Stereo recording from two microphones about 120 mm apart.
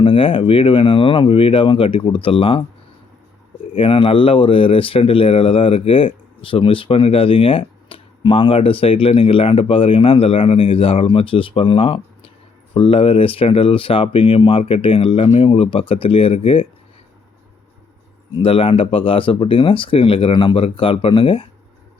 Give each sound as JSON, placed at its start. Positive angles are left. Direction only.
{"t": 0.0, "sound": "speech", "side_deg": 50}
{"t": 3.8, "sound": "speech", "side_deg": 50}
{"t": 18.3, "sound": "speech", "side_deg": 50}